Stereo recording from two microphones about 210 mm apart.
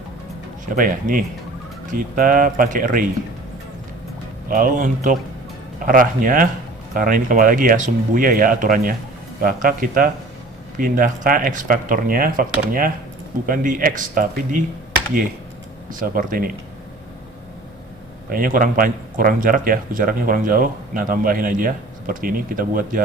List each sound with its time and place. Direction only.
0.6 s speech: 40° right (ahead or behind)
4.4 s speech: 40° right (ahead or behind)
15.9 s speech: 40° right (ahead or behind)
18.3 s speech: 40° right (ahead or behind)